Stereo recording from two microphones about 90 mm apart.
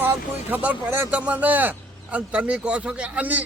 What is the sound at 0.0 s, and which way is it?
Speech, 20° right (ahead or behind).